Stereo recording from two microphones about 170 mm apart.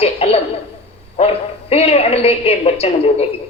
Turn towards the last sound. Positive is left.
turn(degrees=35)  # may be behind; listen again after turning